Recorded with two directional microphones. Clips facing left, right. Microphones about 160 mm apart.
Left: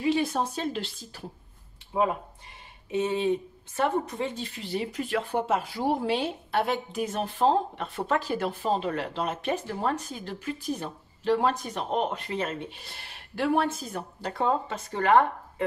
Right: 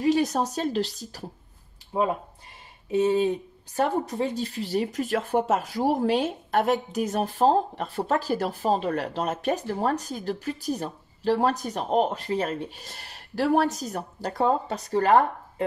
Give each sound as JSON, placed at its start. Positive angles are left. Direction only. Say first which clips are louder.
{"t": 0.0, "sound": "speech", "louder": "right 3 dB", "side_deg": -40}
{"t": 2.9, "sound": "speech", "louder": "right 4 dB", "side_deg": -35}